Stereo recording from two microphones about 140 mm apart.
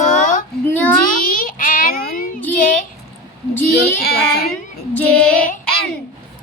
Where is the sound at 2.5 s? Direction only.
70° left (ahead or behind).